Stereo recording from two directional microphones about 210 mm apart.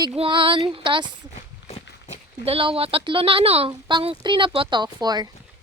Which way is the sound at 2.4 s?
25° right (ahead or behind).